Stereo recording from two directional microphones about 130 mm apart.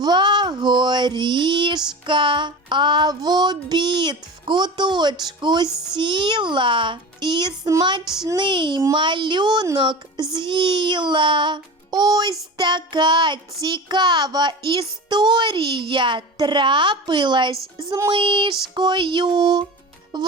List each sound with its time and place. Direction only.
0.0 s a child's voice: 35° right (ahead or behind)
5.6 s a child's voice: 5° right (ahead or behind)
5.9 s a child's voice: 40° right (ahead or behind)
17.7 s child singing: 25° right (ahead or behind)
18.1 s a child's voice: 40° right (ahead or behind)